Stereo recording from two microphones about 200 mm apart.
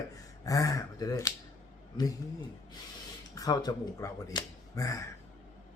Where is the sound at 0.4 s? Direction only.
15° left (ahead or behind).